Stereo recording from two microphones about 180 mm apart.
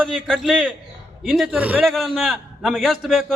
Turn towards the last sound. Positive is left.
turn(degrees=0)  # may be behind; listen again after turning